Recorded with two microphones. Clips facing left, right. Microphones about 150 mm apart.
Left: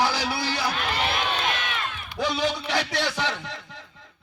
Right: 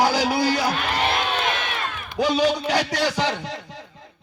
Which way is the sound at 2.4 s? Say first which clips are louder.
Right 5 dB; 40° right (ahead or behind).